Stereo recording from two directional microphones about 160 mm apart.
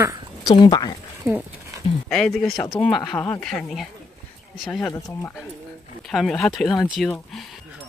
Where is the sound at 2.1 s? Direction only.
5° left (ahead or behind).